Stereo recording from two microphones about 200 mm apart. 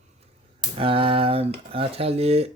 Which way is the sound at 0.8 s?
25° right (ahead or behind).